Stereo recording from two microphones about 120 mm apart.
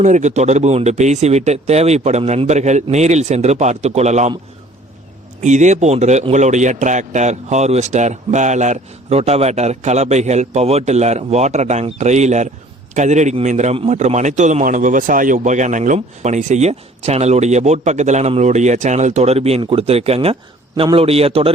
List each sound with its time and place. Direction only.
0.0 s speech: 80° right
5.4 s speech: 85° right
6.3 s a man's voice: 85° right
13.7 s a man's voice: 70° right (ahead or behind); by 21.5 s 50° right (ahead or behind)